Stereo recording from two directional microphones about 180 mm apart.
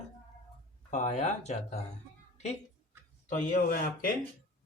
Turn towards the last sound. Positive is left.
turn(degrees=50)  # may be behind; listen again after turning